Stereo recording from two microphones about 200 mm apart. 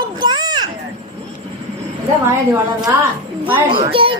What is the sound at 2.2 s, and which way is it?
Speech, 15° right (ahead or behind).